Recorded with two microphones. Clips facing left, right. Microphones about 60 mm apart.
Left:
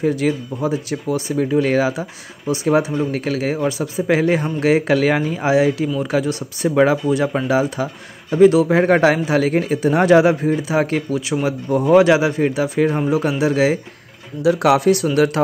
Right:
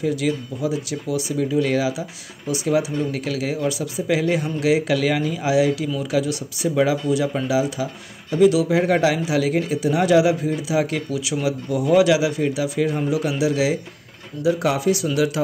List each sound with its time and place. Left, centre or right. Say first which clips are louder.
0.0 s speech: left 4 dB; left
14.4 s speech: left 5 dB; left
15.1 s speech: left 5 dB; left